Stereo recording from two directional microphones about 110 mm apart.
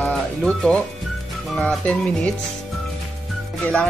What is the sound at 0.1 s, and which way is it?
Speech, 5° left (ahead or behind).